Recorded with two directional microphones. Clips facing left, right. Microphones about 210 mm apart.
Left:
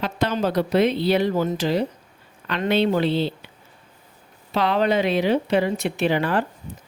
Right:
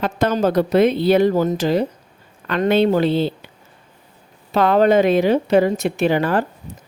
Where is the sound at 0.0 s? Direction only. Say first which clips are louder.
Right 5 dB; 45° right (ahead or behind).